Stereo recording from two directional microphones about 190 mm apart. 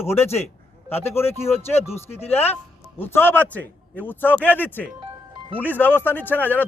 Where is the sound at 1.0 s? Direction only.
10° left (ahead or behind).